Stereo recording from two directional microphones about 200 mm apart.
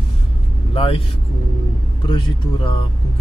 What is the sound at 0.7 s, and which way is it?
Speech, 25° left (ahead or behind).